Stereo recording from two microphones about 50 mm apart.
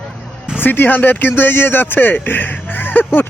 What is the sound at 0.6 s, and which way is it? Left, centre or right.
Speech, left.